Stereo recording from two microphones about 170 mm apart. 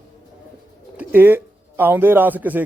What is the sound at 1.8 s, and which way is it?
Speech, 10° right (ahead or behind).